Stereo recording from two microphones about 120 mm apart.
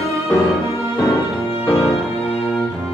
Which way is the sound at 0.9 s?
25° left (ahead or behind).